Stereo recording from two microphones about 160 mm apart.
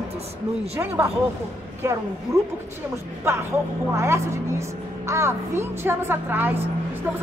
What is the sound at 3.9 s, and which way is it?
A woman's voice, 15° right (ahead or behind).